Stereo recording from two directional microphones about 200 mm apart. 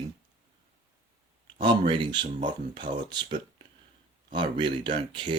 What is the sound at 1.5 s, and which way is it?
Speech, 25° right (ahead or behind).